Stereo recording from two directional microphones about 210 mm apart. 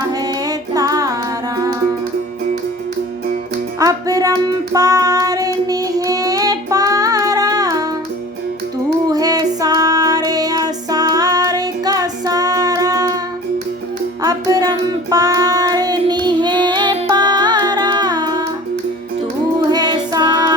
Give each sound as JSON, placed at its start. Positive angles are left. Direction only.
{"t": 0.1, "sound": "music", "side_deg": -20}
{"t": 3.8, "sound": "child singing", "side_deg": -15}
{"t": 9.0, "sound": "music", "side_deg": -15}
{"t": 14.2, "sound": "child singing", "side_deg": -15}
{"t": 19.7, "sound": "music", "side_deg": -20}